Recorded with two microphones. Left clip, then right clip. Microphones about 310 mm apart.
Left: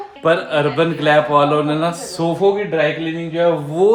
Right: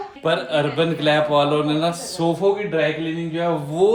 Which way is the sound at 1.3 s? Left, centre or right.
Left.